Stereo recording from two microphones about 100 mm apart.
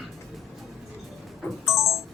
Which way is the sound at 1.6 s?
30° left (ahead or behind).